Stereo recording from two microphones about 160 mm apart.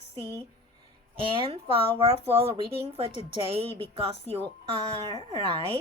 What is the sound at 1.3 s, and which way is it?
Speech, 35° right (ahead or behind).